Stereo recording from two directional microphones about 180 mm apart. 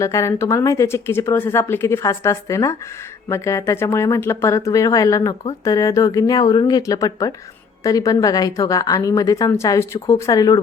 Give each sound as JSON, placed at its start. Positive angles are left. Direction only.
{"t": 0.0, "sound": "a woman's voice", "side_deg": 15}